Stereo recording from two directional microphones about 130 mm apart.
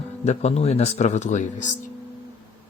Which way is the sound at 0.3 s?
60° left (ahead or behind).